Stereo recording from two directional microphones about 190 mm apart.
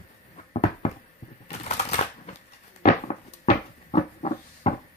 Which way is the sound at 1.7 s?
35° left (ahead or behind).